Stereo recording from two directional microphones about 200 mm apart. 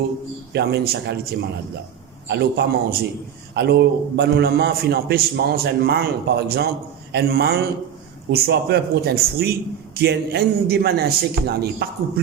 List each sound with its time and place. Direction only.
0.5 s a man's voice: 55° right (ahead or behind)